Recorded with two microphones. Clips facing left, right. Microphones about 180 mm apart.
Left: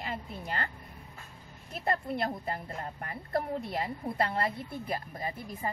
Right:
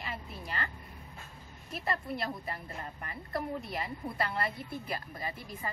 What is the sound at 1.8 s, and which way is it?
A woman's voice, 50° left (ahead or behind).